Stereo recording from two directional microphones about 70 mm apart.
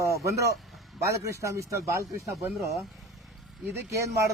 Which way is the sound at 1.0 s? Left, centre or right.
Right.